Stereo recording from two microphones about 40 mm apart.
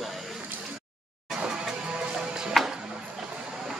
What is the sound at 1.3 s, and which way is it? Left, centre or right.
Music, centre.